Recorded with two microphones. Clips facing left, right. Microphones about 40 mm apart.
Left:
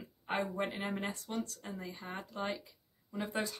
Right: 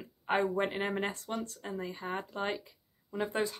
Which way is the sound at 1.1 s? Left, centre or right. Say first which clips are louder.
Right 2 dB; right.